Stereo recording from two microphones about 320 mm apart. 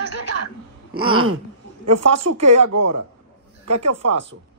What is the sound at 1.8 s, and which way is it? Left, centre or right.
Speech, right.